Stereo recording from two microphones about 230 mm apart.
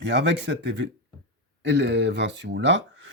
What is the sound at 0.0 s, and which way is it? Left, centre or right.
Speech, right.